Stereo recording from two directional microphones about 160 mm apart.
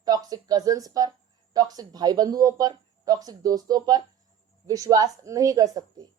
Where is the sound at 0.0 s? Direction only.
25° right (ahead or behind).